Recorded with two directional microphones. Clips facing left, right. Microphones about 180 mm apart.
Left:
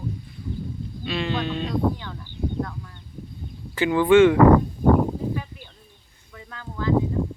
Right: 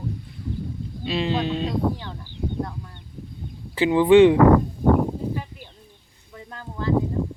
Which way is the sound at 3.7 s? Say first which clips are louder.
Right 2 dB; 25° right (ahead or behind).